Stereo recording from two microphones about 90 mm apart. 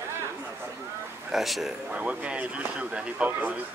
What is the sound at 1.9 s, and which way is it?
Speech, 15° right (ahead or behind).